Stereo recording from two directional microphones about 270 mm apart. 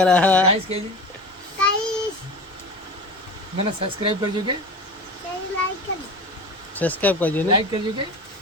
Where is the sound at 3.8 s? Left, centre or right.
Centre.